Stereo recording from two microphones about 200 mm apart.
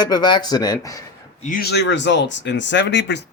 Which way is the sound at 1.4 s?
45° left (ahead or behind).